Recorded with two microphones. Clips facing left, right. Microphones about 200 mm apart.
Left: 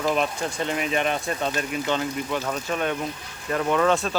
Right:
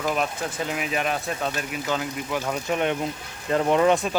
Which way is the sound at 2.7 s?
20° right (ahead or behind).